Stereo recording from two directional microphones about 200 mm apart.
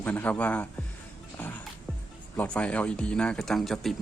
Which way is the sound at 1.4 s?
10° left (ahead or behind).